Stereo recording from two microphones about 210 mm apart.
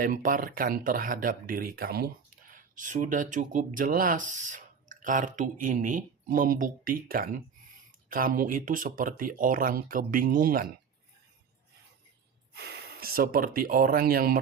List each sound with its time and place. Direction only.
0.0 s speech: 40° right (ahead or behind)
12.5 s speech: 50° right (ahead or behind)